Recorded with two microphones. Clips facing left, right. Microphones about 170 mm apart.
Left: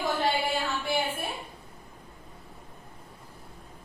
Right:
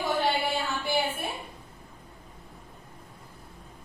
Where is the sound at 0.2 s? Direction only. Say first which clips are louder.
Even; centre (ahead or behind).